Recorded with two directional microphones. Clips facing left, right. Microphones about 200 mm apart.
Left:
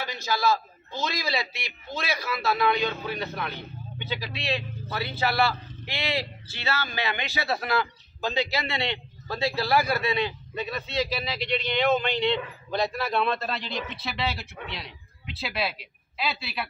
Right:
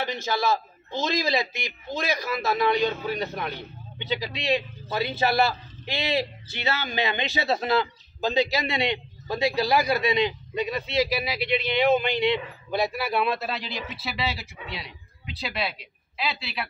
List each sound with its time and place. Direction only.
0.0 s a man's voice: 20° right (ahead or behind); by 16.6 s centre (ahead or behind)